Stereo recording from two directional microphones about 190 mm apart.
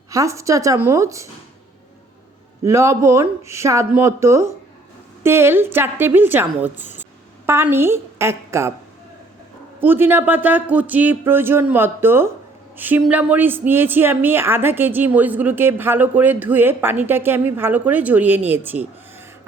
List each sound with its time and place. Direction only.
0.1 s a woman's voice: 15° right (ahead or behind)
2.6 s a woman's voice: 15° right (ahead or behind)
9.8 s a woman's voice: 10° right (ahead or behind)